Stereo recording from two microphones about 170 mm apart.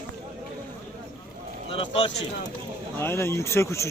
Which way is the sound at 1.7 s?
35° left (ahead or behind).